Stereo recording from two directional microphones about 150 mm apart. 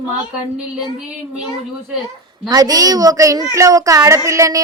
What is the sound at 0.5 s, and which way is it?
Child singing, 5° right (ahead or behind).